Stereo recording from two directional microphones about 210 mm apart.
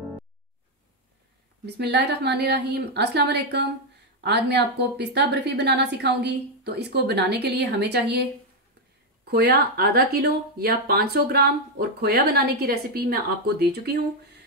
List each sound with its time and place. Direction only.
1.8 s a woman's voice: 50° right (ahead or behind)